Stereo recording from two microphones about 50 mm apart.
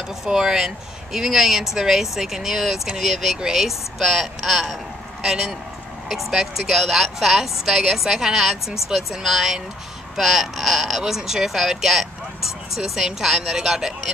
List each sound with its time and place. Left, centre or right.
0.2 s speech: centre